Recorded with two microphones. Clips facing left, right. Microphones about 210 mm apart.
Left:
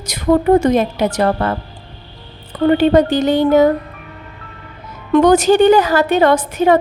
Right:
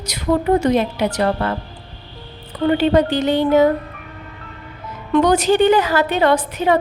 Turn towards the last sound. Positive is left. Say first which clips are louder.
# left 4 dB
turn(degrees=45)  # may be behind; listen again after turning